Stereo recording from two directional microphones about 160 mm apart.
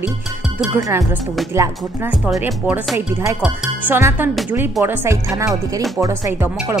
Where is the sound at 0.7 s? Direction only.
20° right (ahead or behind).